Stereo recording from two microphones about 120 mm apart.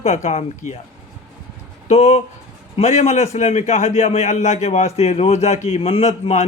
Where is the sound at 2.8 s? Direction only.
80° left.